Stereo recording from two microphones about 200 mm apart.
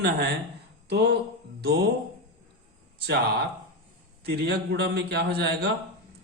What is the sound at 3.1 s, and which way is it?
A man's voice, 55° right (ahead or behind).